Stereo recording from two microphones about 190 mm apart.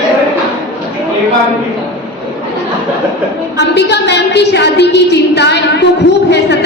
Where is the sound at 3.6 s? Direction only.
65° left (ahead or behind).